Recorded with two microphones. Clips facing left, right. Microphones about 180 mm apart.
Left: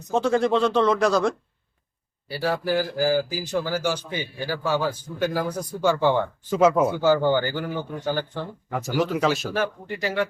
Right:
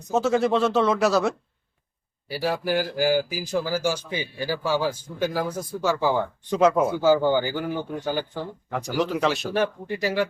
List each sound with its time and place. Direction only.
0.1 s speech: 5° right (ahead or behind)
6.6 s speech: 5° left (ahead or behind)
7.0 s speech: 10° right (ahead or behind)
8.7 s speech: centre (ahead or behind)
9.5 s speech: 20° right (ahead or behind)